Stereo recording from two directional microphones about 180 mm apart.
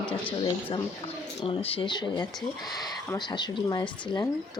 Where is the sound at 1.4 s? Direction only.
30° left (ahead or behind).